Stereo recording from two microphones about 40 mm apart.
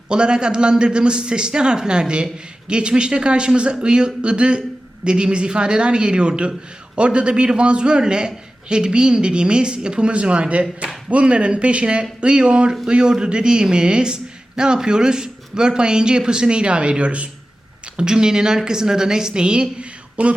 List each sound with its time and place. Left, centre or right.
0.1 s speech: right
17.9 s a woman's voice: centre
19.8 s a sound: right